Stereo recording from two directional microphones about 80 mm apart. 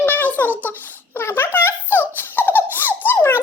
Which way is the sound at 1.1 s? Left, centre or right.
Left.